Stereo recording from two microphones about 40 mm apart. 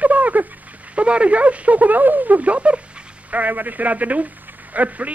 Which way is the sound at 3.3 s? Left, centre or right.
Right.